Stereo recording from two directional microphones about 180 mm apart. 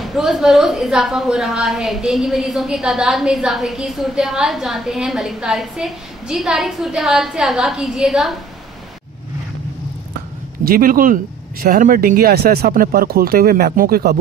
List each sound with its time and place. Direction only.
0.0 s a woman's voice: centre (ahead or behind)
10.6 s speech: 50° right (ahead or behind)